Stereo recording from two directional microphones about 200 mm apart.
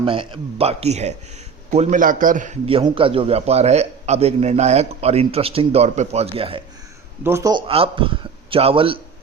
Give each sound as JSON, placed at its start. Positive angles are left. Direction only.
{"t": 0.0, "sound": "a man's voice", "side_deg": -25}
{"t": 2.6, "sound": "a man's voice", "side_deg": -25}
{"t": 7.3, "sound": "speech", "side_deg": -15}
{"t": 7.7, "sound": "a man's voice", "side_deg": -25}